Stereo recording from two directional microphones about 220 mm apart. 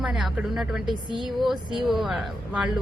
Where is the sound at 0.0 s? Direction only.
5° right (ahead or behind).